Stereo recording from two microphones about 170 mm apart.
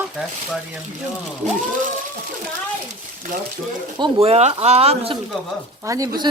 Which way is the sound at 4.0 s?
35° right (ahead or behind).